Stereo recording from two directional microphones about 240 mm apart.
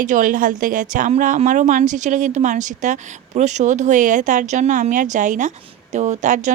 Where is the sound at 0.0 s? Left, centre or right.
Right.